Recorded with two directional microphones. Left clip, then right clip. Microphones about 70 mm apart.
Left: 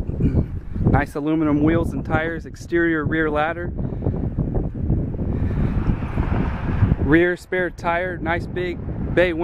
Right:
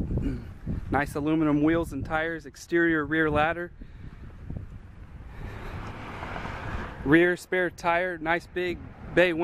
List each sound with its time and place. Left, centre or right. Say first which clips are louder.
0.2 s a sound: left 13 dB; centre
0.9 s speech: left 4 dB; centre
2.8 s speech: left 4 dB; centre
5.8 s vehicle: left 9 dB; right
7.1 s speech: left 3 dB; right